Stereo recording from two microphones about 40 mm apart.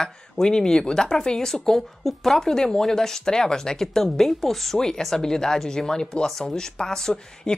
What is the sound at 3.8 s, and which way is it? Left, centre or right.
Speech, centre.